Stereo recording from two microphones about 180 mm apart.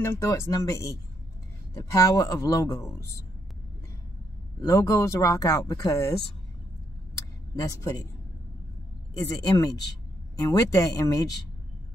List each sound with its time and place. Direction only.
0.0 s speech: 15° left (ahead or behind)
4.6 s speech: 20° left (ahead or behind)
7.5 s speech: 20° left (ahead or behind)
9.3 s speech: 20° left (ahead or behind)